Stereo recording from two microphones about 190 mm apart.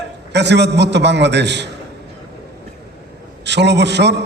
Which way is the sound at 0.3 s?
65° right (ahead or behind).